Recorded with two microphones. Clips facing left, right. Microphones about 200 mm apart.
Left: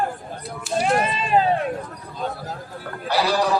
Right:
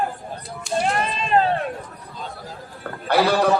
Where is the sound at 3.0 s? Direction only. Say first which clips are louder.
Right 3 dB; 55° right (ahead or behind).